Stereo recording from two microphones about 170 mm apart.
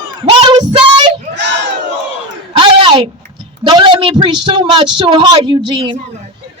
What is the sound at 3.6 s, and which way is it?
A woman's voice, 30° right (ahead or behind).